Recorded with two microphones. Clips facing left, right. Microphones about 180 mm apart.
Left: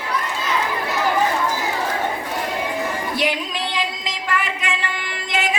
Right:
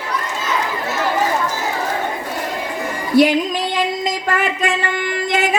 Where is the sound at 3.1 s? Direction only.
45° right (ahead or behind).